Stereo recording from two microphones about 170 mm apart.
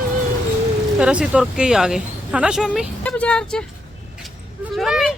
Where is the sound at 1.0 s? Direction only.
5° right (ahead or behind).